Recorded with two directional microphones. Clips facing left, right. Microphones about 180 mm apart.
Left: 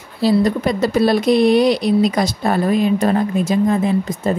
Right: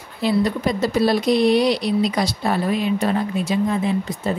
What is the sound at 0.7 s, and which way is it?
A woman's voice, 60° left (ahead or behind).